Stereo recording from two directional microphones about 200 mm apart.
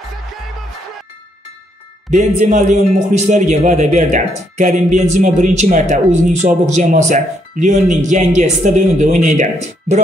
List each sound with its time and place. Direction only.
2.0 s a man's voice: 35° right (ahead or behind)